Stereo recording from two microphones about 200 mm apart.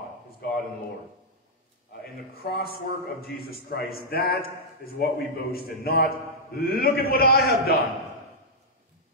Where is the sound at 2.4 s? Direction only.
50° left (ahead or behind).